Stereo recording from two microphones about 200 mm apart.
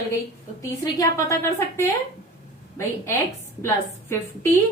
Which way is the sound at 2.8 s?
10° left (ahead or behind).